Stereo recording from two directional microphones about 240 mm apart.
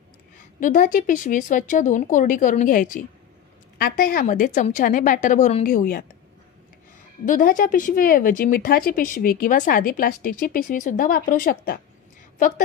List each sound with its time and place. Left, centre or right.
0.6 s speech: left
7.2 s speech: left